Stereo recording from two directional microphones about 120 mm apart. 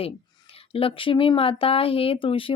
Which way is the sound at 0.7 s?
50° left (ahead or behind).